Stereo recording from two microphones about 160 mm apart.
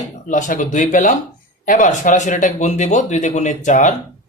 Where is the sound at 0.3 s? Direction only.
55° left (ahead or behind).